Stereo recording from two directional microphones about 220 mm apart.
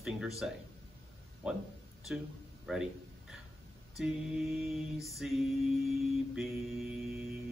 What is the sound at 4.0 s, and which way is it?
Mantra, 5° right (ahead or behind).